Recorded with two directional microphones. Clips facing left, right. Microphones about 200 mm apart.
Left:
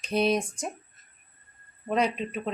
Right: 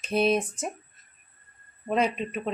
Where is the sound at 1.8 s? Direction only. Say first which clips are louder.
Right 1 dB; 5° right (ahead or behind).